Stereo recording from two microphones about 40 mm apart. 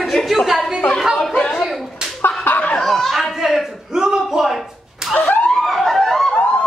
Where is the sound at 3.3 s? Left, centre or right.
Centre.